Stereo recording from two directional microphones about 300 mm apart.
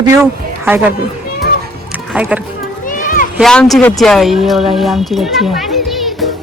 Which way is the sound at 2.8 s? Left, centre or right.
Left.